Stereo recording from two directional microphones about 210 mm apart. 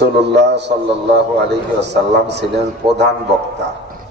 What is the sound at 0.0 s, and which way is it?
A man's voice, 55° right (ahead or behind).